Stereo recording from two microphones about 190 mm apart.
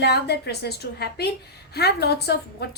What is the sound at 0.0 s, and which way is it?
A woman's voice, 60° left (ahead or behind).